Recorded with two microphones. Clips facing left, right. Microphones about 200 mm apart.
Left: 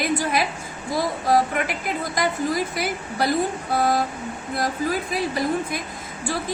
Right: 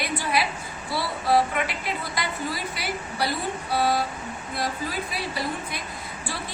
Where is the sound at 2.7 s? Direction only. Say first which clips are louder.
Left 4 dB; 50° left (ahead or behind).